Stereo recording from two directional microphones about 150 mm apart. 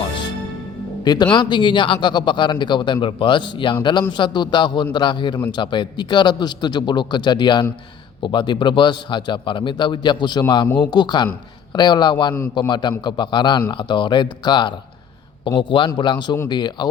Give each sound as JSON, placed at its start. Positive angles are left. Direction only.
{"t": 1.0, "sound": "a man's voice", "side_deg": 30}